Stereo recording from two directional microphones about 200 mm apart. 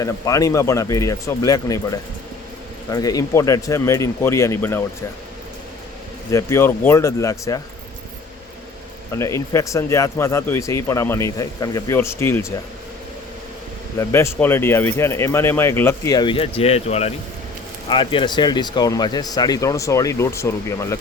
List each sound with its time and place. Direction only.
0.0 s speech: 15° left (ahead or behind)
6.3 s speech: 15° left (ahead or behind)
9.1 s speech: 15° left (ahead or behind)
14.0 s speech: 15° left (ahead or behind)